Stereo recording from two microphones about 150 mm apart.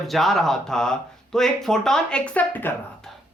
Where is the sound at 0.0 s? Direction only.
Centre (ahead or behind).